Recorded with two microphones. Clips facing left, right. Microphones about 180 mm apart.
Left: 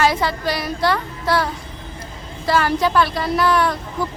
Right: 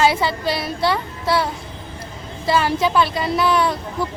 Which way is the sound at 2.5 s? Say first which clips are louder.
Even; 25° right (ahead or behind).